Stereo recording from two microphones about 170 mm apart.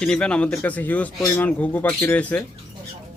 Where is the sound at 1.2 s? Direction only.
20° left (ahead or behind).